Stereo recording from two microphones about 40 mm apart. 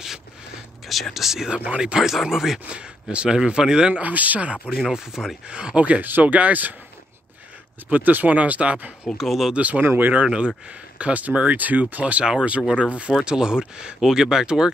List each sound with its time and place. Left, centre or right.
0.8 s speech: centre
2.7 s speech: right
4.0 s speech: right
4.9 s speech: centre
5.5 s speech: right
7.9 s speech: right
8.4 s speech: right
9.2 s speech: centre
9.5 s speech: right
9.8 s speech: right
10.2 s speech: right
13.2 s speech: centre